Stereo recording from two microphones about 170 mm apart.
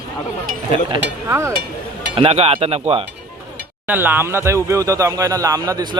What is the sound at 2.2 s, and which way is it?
Speech, 35° right (ahead or behind).